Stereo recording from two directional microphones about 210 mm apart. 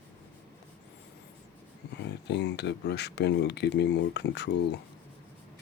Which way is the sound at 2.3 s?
55° left (ahead or behind).